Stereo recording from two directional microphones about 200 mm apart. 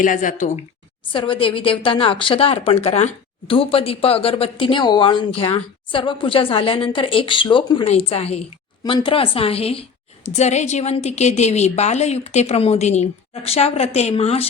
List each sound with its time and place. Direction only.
0.0 s a woman's voice: 40° left (ahead or behind)
1.1 s a woman's voice: 25° left (ahead or behind)